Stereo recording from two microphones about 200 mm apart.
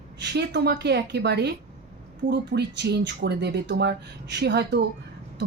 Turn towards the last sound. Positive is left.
turn(degrees=-55)  # may be behind; listen again after turning